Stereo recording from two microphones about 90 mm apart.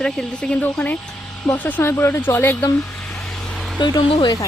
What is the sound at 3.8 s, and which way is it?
Speech, 60° left (ahead or behind).